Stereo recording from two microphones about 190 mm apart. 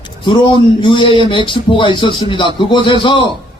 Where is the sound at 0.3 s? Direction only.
25° left (ahead or behind).